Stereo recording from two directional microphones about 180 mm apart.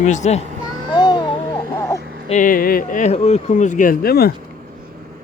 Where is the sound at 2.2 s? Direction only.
45° left (ahead or behind); by 4.3 s 60° left (ahead or behind).